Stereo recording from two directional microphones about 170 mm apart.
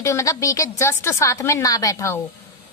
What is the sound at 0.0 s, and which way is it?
A woman's voice, 15° left (ahead or behind).